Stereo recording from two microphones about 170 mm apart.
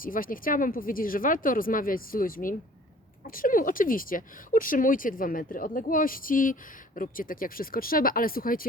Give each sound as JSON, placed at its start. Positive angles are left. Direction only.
{"t": 0.0, "sound": "speech", "side_deg": 55}